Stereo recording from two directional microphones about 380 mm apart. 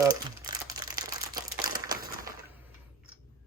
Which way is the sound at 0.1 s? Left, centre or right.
Centre.